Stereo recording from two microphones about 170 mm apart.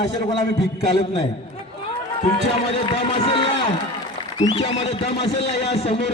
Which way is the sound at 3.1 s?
30° left (ahead or behind).